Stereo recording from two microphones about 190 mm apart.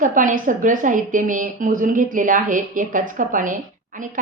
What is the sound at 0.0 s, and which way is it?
A woman's voice, 45° right (ahead or behind).